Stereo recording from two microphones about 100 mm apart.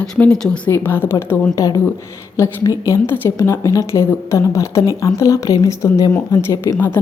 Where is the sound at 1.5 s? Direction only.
35° left (ahead or behind).